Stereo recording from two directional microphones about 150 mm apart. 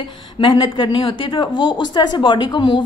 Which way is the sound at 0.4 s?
35° left (ahead or behind).